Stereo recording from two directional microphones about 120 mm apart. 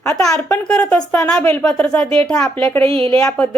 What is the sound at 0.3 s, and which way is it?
A woman's voice, 10° left (ahead or behind).